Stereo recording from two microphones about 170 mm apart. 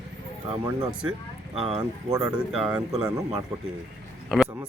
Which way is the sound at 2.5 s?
5° right (ahead or behind).